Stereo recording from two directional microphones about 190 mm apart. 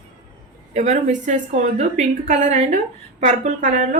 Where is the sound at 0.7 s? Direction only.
35° right (ahead or behind).